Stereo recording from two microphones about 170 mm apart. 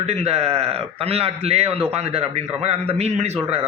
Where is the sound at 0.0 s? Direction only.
40° right (ahead or behind).